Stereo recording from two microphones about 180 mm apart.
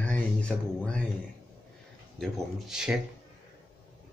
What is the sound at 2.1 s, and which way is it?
Speech, centre (ahead or behind).